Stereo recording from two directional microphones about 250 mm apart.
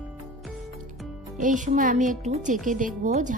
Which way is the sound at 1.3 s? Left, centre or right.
Right.